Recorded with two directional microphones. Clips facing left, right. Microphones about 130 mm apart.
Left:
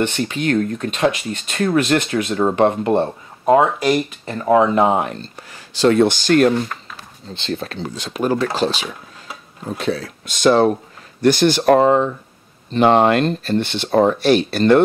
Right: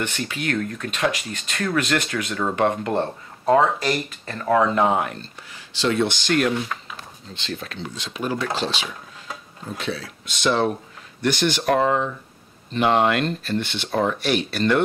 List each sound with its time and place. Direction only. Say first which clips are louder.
0.0 s speech: left 7 dB; 25° left (ahead or behind)
5.5 s speech: left 8 dB; 45° left (ahead or behind)